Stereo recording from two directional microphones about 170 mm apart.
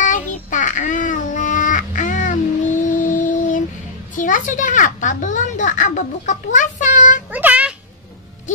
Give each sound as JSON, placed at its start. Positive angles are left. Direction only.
{"t": 0.0, "sound": "child singing", "side_deg": 50}
{"t": 4.2, "sound": "a child's voice", "side_deg": 50}
{"t": 7.2, "sound": "a sound", "side_deg": -10}